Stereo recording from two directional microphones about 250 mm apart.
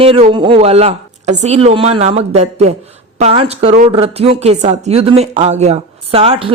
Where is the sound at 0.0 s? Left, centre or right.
Right.